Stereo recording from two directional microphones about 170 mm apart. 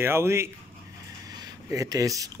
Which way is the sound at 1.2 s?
25° right (ahead or behind).